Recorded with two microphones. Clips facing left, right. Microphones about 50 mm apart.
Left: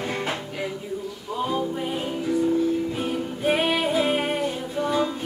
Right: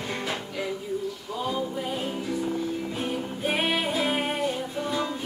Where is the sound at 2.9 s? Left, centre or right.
Centre.